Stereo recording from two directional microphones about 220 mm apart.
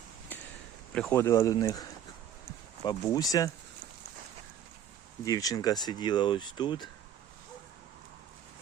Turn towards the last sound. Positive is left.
turn(degrees=20)  # may be behind; listen again after turning